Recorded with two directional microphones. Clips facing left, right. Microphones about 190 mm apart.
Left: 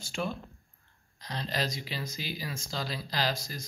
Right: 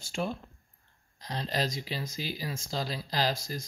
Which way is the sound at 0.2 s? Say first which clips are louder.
Right 1 dB; 35° right (ahead or behind).